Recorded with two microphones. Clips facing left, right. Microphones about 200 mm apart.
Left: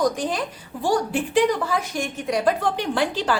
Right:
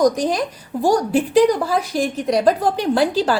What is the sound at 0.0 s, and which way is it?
A woman's voice, 40° right (ahead or behind).